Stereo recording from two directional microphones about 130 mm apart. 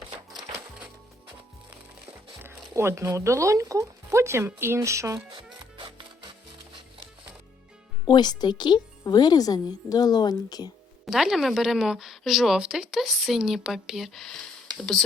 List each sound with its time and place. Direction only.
2.4 s speech: 20° right (ahead or behind)
5.3 s music: 40° right (ahead or behind)
8.0 s speech: 35° left (ahead or behind)
11.0 s a woman's voice: centre (ahead or behind)